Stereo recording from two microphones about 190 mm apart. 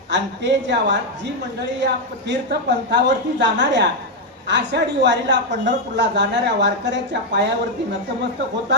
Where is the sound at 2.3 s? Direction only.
65° right (ahead or behind).